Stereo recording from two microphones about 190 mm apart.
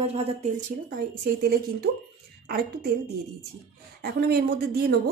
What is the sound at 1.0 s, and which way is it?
Speech, 55° right (ahead or behind).